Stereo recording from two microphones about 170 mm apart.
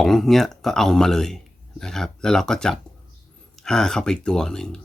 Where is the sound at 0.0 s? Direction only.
Centre (ahead or behind).